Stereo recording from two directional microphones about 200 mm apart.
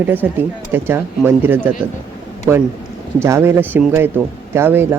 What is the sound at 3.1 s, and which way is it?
Speech, 15° right (ahead or behind).